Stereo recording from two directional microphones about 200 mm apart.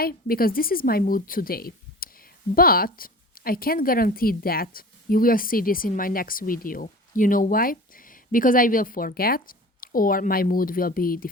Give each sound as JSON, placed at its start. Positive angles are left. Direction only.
{"t": 0.0, "sound": "a woman's voice", "side_deg": 50}